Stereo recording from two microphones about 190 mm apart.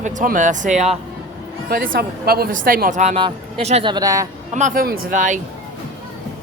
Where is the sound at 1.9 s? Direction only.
55° right (ahead or behind); by 3.9 s 35° right (ahead or behind).